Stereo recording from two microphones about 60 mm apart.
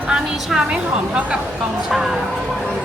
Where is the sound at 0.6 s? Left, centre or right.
Centre.